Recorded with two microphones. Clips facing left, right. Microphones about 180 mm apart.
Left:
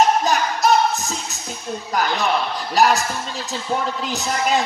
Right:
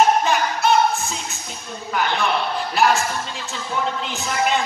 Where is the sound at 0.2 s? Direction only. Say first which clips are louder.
Left 1 dB; 40° left (ahead or behind).